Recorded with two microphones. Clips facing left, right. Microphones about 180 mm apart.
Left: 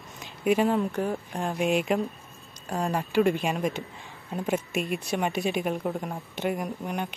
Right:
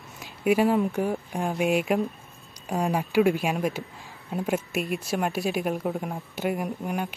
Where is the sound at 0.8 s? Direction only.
15° right (ahead or behind).